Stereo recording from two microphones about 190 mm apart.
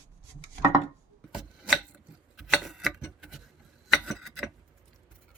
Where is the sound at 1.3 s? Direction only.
5° right (ahead or behind).